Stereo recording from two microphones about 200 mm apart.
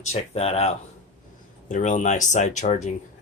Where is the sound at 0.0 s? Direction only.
35° left (ahead or behind).